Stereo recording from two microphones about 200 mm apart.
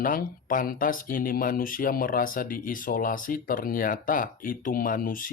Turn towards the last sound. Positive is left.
turn(degrees=45)  # may be behind; listen again after turning